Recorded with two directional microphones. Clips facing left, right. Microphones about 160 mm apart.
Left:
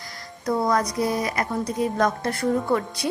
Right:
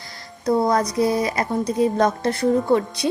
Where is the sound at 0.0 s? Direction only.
25° right (ahead or behind).